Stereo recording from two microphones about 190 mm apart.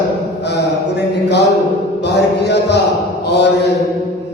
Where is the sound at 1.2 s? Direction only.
65° left (ahead or behind).